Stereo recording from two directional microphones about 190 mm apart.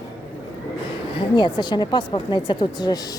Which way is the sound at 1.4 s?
25° left (ahead or behind).